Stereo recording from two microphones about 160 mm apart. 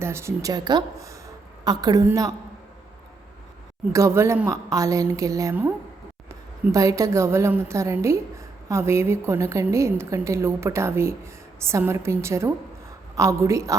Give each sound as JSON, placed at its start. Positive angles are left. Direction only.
{"t": 0.0, "sound": "a woman's voice", "side_deg": -15}
{"t": 3.9, "sound": "a woman's voice", "side_deg": -20}